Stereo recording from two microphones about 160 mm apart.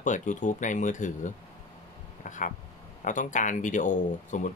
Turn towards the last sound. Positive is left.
turn(degrees=50)  # may be behind; listen again after turning